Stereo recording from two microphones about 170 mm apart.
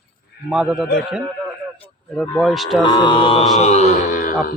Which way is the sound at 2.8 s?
30° left (ahead or behind).